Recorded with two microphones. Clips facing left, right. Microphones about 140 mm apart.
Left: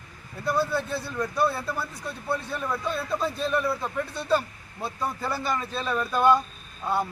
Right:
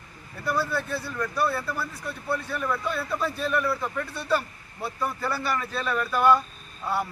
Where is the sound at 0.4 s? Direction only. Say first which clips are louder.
Left 2 dB; 20° left (ahead or behind).